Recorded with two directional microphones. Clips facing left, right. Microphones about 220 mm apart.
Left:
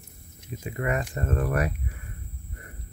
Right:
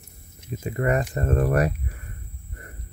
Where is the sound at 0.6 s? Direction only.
40° right (ahead or behind).